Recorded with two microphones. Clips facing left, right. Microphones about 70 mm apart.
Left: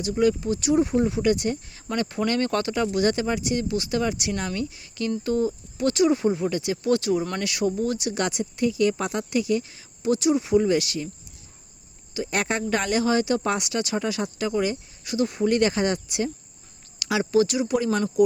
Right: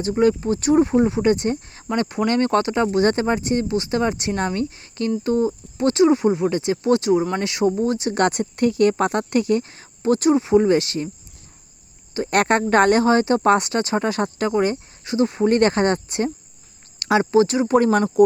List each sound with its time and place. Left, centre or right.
0.0 s speech: right
2.0 s speech: right
8.1 s speech: right
10.4 s speech: right
12.1 s speech: right